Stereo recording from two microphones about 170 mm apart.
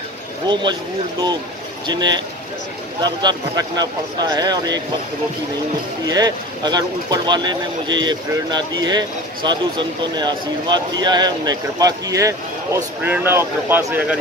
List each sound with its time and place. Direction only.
0.5 s speech: 25° right (ahead or behind)
1.9 s speech: 25° right (ahead or behind)
6.0 s speech: 25° right (ahead or behind)